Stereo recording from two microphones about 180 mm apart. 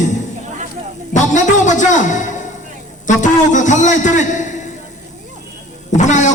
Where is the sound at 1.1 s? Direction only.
40° left (ahead or behind).